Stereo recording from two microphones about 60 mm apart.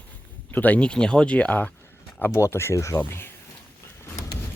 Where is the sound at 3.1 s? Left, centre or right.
Left.